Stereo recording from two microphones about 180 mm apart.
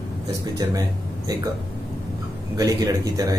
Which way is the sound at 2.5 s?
20° right (ahead or behind).